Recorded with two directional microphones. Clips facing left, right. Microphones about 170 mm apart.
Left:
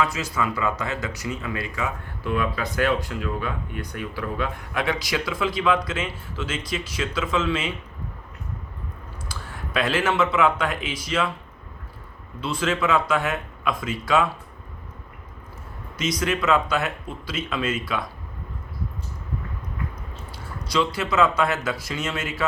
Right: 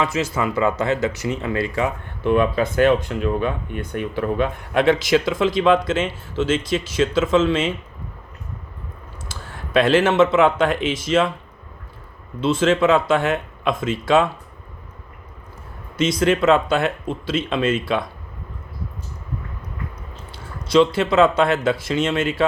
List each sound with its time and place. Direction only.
0.0 s speech: 25° right (ahead or behind)
9.3 s speech: 25° right (ahead or behind)
12.4 s speech: 25° right (ahead or behind)
16.0 s speech: 25° right (ahead or behind)
20.3 s speech: 25° right (ahead or behind)